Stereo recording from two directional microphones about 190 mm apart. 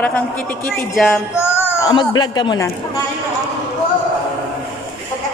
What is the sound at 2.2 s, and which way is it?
Speech, 20° left (ahead or behind).